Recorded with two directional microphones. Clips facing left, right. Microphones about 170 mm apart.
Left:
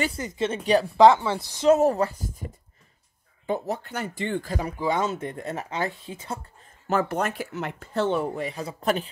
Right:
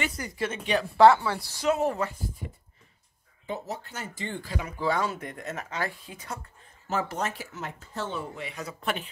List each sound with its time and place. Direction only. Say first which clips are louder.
0.0 s speech: left 4 dB; 25° left (ahead or behind)
1.7 s speech: left 7 dB; 40° left (ahead or behind)
3.4 s speech: left 7 dB; 55° left (ahead or behind)
4.7 s speech: left 1 dB; 20° left (ahead or behind)
6.9 s speech: left 5 dB; 60° left (ahead or behind)
8.4 s speech: left 6 dB; 35° left (ahead or behind)